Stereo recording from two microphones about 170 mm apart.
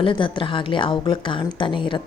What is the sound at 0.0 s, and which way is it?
Speech, 30° left (ahead or behind).